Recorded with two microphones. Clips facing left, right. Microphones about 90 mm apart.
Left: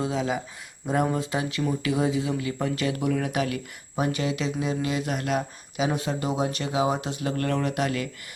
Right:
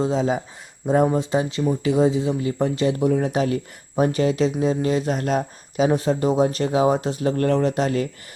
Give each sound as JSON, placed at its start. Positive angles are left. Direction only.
{"t": 0.0, "sound": "speech", "side_deg": -30}